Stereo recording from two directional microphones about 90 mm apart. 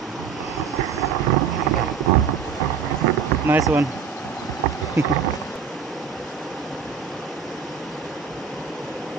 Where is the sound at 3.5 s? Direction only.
20° right (ahead or behind).